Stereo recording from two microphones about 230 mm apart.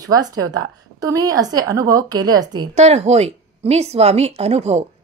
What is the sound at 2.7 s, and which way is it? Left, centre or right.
Speech, right.